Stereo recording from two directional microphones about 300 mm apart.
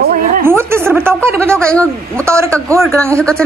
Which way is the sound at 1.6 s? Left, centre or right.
Centre.